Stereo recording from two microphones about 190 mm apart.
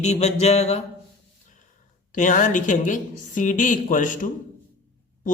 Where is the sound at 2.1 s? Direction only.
40° left (ahead or behind).